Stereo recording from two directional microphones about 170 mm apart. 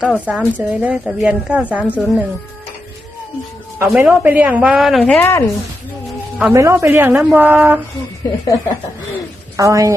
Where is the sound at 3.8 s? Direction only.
10° right (ahead or behind); by 5.4 s 10° left (ahead or behind).